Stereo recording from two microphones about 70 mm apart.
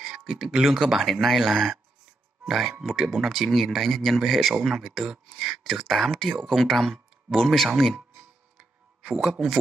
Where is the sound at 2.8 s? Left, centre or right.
Centre.